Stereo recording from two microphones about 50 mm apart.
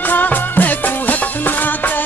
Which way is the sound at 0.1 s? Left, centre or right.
Left.